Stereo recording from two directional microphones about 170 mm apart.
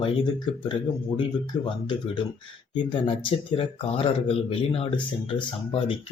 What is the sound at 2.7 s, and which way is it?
Speech, 30° left (ahead or behind).